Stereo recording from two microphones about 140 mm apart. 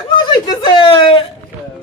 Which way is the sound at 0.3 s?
35° left (ahead or behind).